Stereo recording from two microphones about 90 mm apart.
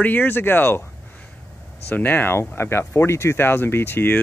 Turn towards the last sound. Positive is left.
turn(degrees=25)  # may be behind; listen again after turning